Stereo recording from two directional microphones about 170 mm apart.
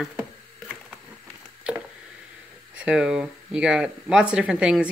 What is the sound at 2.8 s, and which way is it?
Speech, 5° right (ahead or behind).